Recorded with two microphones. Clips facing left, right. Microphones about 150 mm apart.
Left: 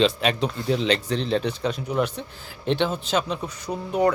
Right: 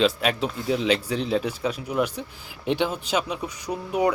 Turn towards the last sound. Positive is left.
turn(degrees=-10)  # may be behind; listen again after turning